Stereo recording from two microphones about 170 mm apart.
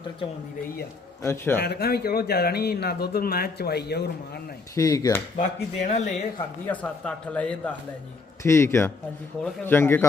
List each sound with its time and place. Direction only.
1.2 s speech: 15° left (ahead or behind)
1.6 s speech: 70° left (ahead or behind)
4.7 s speech: 20° left (ahead or behind)
5.4 s speech: 45° left (ahead or behind)
6.7 s speech: 5° left (ahead or behind)